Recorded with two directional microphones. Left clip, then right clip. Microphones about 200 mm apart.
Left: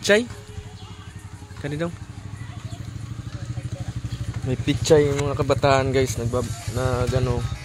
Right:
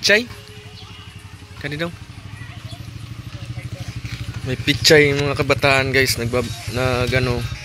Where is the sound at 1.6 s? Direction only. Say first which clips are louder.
Right 3 dB; 10° left (ahead or behind).